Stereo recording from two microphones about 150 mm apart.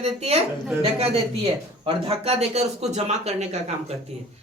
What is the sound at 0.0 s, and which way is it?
Speech, 45° right (ahead or behind).